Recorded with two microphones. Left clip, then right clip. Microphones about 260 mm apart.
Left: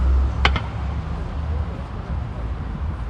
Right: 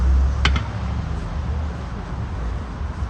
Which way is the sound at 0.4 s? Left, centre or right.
Centre.